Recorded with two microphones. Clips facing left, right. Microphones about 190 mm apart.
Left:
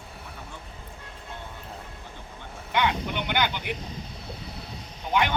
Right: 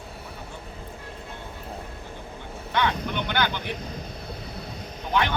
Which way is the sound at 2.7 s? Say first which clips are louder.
Even; 15° left (ahead or behind).